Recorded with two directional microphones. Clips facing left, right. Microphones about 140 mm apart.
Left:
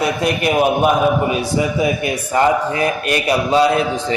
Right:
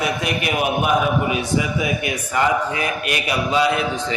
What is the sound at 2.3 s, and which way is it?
Speech, 35° left (ahead or behind).